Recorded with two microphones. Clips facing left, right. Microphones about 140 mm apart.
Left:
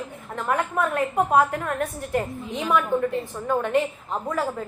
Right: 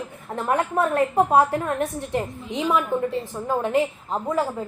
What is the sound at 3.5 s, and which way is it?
Speech, 25° right (ahead or behind).